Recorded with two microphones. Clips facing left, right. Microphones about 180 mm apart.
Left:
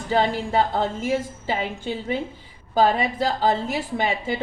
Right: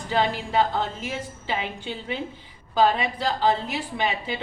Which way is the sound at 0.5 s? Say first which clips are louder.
Left 1 dB; 45° left (ahead or behind).